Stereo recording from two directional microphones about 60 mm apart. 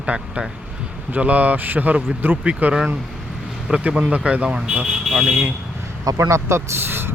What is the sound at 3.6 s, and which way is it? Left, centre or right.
Speech, centre.